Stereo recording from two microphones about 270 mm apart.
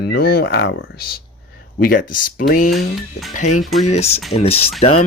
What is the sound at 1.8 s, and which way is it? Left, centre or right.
Speech, left.